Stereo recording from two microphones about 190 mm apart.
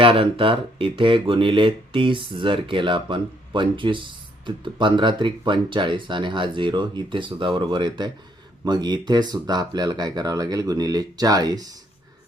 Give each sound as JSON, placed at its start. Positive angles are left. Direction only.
{"t": 0.0, "sound": "speech", "side_deg": -30}